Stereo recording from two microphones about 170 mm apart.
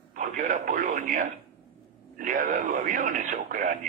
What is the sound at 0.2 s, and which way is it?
A man's voice, 50° right (ahead or behind).